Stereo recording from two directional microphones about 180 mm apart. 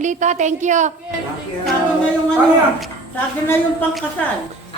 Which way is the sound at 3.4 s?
10° left (ahead or behind).